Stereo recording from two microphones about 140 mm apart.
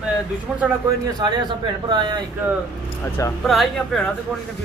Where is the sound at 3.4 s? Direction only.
Centre (ahead or behind).